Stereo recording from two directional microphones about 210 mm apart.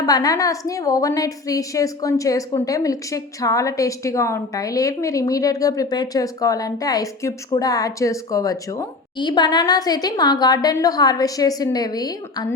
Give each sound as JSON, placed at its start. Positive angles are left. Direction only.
{"t": 0.0, "sound": "a woman's voice", "side_deg": 20}